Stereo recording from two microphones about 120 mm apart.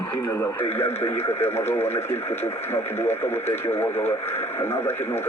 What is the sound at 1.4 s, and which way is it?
Speech, 20° left (ahead or behind).